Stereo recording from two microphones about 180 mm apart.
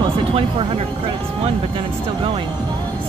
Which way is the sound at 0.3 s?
30° right (ahead or behind).